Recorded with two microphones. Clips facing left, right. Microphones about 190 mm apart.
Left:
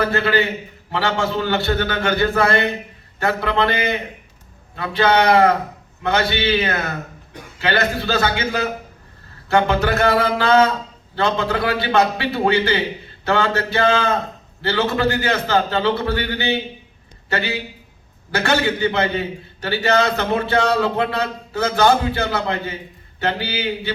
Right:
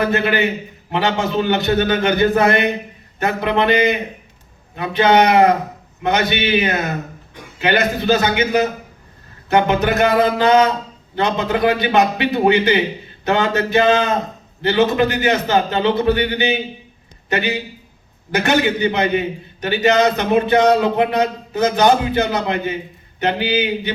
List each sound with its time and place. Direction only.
0.0 s a man's voice: 20° right (ahead or behind)